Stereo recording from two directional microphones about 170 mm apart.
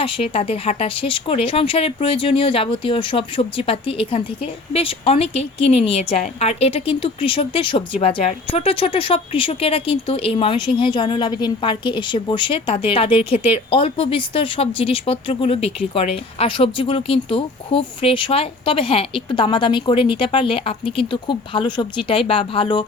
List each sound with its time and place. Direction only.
0.0 s speech: 35° left (ahead or behind)